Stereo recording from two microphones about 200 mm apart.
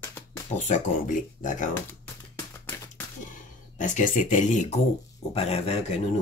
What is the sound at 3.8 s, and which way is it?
Speech, 40° left (ahead or behind).